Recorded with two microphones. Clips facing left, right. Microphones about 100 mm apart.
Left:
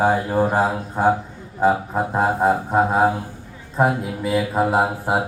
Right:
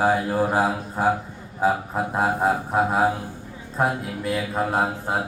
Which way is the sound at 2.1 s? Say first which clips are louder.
Left 3 dB; 5° left (ahead or behind).